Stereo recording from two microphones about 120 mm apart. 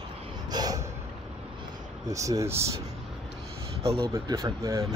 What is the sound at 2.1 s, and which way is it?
Speech, 25° right (ahead or behind).